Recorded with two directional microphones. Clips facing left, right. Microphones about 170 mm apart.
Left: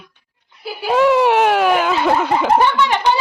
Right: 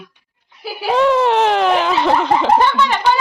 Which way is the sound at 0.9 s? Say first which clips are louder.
Left 1 dB; 10° left (ahead or behind).